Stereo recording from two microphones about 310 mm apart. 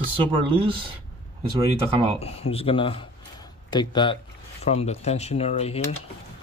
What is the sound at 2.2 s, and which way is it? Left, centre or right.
Speech, centre.